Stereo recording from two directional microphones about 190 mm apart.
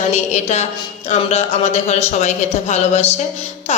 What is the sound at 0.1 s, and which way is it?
A woman's voice, 40° left (ahead or behind).